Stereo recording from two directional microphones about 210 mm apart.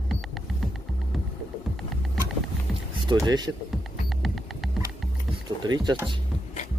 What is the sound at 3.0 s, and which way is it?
Speech, 20° right (ahead or behind).